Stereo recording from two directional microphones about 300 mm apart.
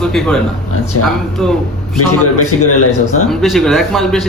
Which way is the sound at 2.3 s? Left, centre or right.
Left.